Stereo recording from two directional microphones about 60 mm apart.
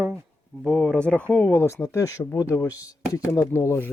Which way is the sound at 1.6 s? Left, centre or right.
Left.